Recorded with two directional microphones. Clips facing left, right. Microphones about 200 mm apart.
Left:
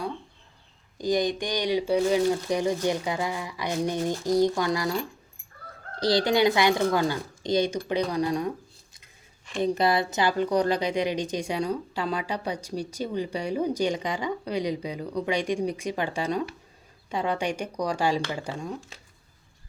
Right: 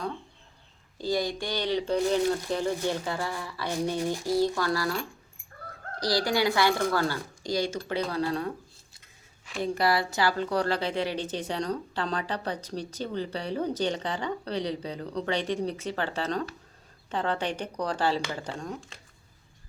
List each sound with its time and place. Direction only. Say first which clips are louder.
0.9 s a woman's voice: left 4 dB; 15° left (ahead or behind)
6.0 s speech: left 4 dB; 25° left (ahead or behind)
9.6 s a woman's voice: left 3 dB; 20° left (ahead or behind)